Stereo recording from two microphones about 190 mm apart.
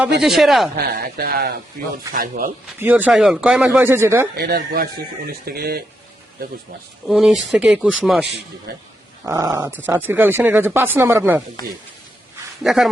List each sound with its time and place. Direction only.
0.2 s speech: centre (ahead or behind)
0.8 s speech: 50° right (ahead or behind)
2.7 s speech: 10° right (ahead or behind)
4.4 s speech: 55° right (ahead or behind)
7.1 s speech: centre (ahead or behind)
9.2 s speech: 15° right (ahead or behind)
12.6 s speech: centre (ahead or behind)